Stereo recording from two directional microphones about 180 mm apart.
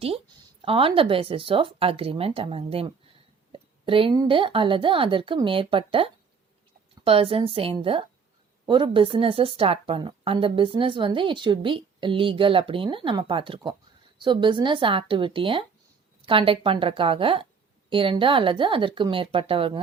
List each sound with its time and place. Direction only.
0.6 s speech: 30° right (ahead or behind)